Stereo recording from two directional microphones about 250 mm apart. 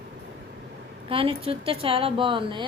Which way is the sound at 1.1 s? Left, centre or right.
Right.